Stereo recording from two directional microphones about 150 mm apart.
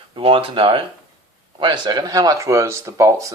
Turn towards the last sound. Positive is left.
turn(degrees=-20)  # may be behind; listen again after turning